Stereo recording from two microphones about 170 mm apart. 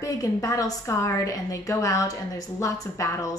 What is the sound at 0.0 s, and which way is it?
A woman's voice, 20° left (ahead or behind).